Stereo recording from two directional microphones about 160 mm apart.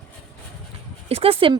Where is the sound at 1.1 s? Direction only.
35° right (ahead or behind).